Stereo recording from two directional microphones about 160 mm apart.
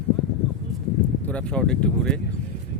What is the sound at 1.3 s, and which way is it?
Speech, 5° left (ahead or behind).